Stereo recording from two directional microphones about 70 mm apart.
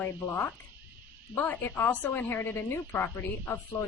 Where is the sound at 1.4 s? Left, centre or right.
Left.